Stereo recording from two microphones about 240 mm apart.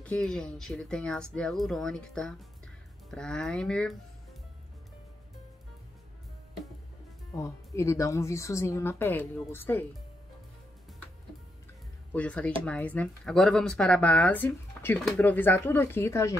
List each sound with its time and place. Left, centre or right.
0.0 s speech: centre
7.3 s a woman's voice: centre
12.1 s speech: centre